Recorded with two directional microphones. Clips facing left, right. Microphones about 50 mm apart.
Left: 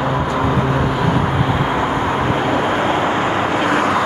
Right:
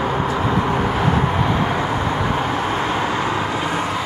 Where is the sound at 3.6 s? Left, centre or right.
Left.